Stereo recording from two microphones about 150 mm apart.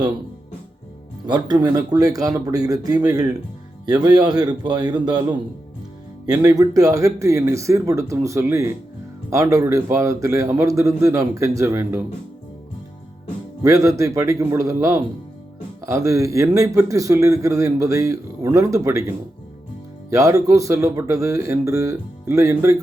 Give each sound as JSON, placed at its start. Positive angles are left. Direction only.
{"t": 1.3, "sound": "speech", "side_deg": -25}
{"t": 13.6, "sound": "speech", "side_deg": -20}
{"t": 20.1, "sound": "speech", "side_deg": -20}